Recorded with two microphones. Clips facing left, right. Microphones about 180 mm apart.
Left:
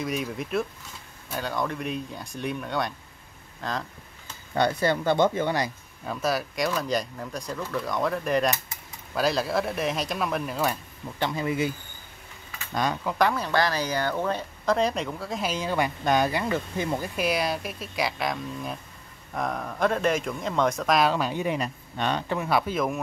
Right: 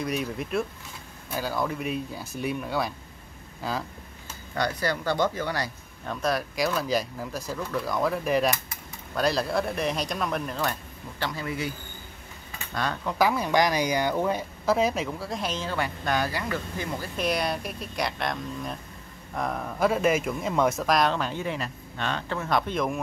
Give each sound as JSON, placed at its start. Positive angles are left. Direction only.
{"t": 0.0, "sound": "speech", "side_deg": 0}
{"t": 4.6, "sound": "speech", "side_deg": 25}
{"t": 6.0, "sound": "speech", "side_deg": 5}
{"t": 11.1, "sound": "speech", "side_deg": 20}
{"t": 13.0, "sound": "speech", "side_deg": -10}
{"t": 17.2, "sound": "speech", "side_deg": 5}